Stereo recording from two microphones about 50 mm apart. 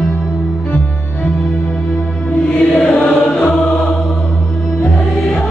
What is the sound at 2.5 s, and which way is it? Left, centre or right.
Music, left.